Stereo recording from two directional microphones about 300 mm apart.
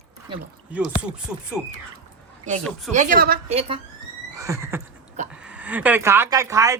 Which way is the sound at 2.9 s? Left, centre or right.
Right.